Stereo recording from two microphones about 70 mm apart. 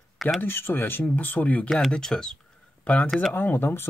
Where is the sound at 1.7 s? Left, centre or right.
Centre.